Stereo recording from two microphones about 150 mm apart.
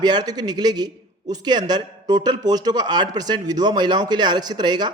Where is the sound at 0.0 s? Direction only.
30° right (ahead or behind).